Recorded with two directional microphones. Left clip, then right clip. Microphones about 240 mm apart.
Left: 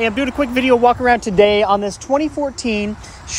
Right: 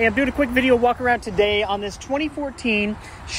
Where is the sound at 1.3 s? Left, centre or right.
Left.